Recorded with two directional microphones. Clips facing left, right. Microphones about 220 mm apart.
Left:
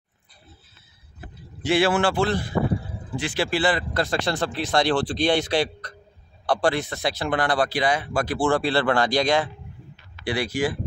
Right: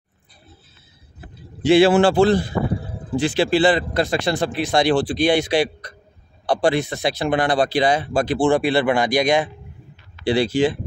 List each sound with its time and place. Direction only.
1.6 s a man's voice: 30° right (ahead or behind)
3.3 s speech: 25° right (ahead or behind)
10.2 s speech: 25° right (ahead or behind)